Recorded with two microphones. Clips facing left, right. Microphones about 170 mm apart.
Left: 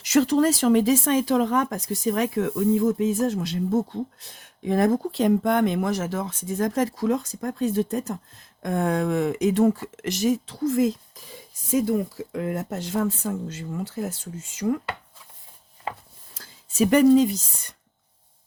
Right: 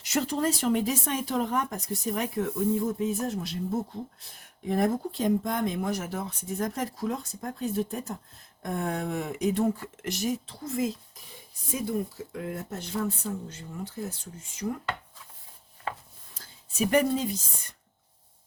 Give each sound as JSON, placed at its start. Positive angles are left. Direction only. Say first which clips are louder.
{"t": 0.0, "sound": "speech", "louder": "left 8 dB", "side_deg": 90}
{"t": 16.3, "sound": "speech", "louder": "left 3 dB", "side_deg": 90}